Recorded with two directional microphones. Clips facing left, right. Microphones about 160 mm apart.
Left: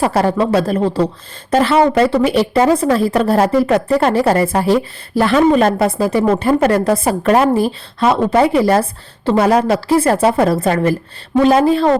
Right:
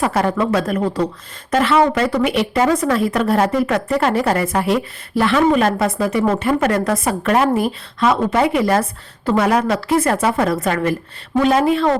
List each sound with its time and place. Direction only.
0.0 s speech: 35° left (ahead or behind)